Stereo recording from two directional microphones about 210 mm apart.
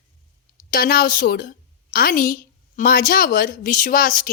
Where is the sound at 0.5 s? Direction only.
45° left (ahead or behind).